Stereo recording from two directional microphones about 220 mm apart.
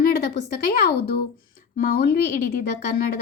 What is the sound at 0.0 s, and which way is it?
Speech, 45° left (ahead or behind).